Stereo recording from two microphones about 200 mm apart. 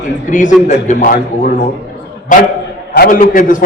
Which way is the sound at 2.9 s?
45° left (ahead or behind).